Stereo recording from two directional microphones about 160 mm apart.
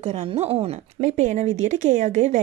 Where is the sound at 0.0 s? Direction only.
40° right (ahead or behind).